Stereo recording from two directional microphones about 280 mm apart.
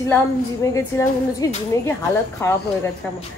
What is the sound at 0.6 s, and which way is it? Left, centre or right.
Speech, centre.